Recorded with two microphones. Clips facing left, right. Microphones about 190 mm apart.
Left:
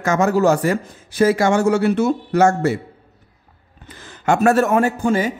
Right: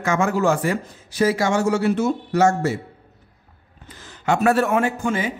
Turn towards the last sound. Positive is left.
turn(degrees=40)  # may be behind; listen again after turning